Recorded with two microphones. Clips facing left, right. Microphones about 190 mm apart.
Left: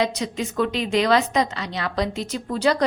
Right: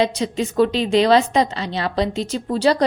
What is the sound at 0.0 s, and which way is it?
A woman's voice, 30° right (ahead or behind).